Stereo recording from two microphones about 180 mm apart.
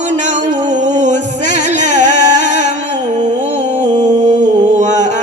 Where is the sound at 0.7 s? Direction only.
40° right (ahead or behind).